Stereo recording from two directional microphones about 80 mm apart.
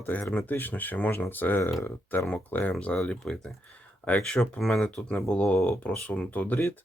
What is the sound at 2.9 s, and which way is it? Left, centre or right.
Speech, centre.